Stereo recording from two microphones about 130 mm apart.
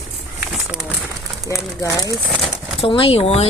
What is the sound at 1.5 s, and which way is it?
Speech, 25° left (ahead or behind).